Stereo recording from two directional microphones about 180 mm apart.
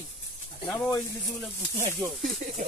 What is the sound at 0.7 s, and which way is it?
Speech, 20° left (ahead or behind).